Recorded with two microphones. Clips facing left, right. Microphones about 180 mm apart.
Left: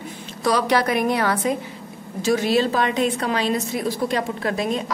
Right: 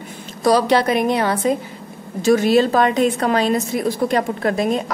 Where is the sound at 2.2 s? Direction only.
50° right (ahead or behind).